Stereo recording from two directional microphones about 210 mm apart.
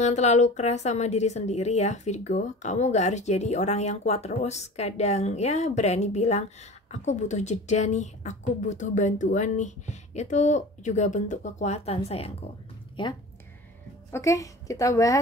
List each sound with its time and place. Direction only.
0.0 s a woman's voice: 35° left (ahead or behind); by 15.1 s 15° left (ahead or behind)